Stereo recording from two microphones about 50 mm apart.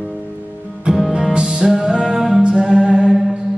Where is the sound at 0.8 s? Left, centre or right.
Centre.